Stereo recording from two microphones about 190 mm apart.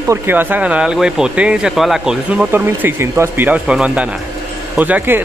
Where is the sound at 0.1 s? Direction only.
10° right (ahead or behind).